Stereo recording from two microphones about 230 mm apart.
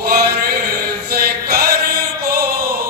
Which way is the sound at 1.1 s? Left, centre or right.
Right.